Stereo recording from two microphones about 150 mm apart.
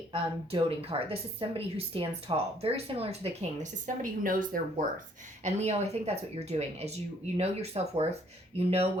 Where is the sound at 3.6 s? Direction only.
60° right (ahead or behind).